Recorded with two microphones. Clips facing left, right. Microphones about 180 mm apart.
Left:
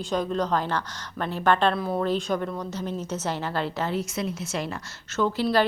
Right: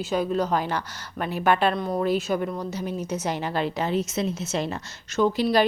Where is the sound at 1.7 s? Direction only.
5° left (ahead or behind).